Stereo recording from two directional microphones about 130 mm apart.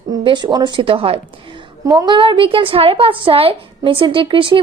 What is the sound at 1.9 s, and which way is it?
A woman's voice, 30° right (ahead or behind).